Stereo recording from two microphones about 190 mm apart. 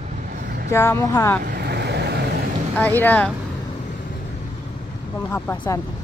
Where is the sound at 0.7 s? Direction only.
15° left (ahead or behind).